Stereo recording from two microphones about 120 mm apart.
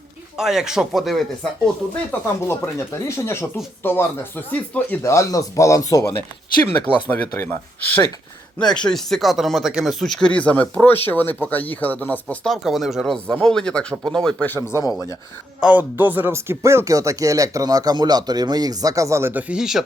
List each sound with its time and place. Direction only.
0.3 s speech: 5° right (ahead or behind)
2.5 s speech: 25° left (ahead or behind)
5.0 s speech: 25° left (ahead or behind)
12.5 s speech: centre (ahead or behind)
14.4 s speech: 15° left (ahead or behind)
14.8 s speech: 30° left (ahead or behind)
15.6 s speech: 15° right (ahead or behind)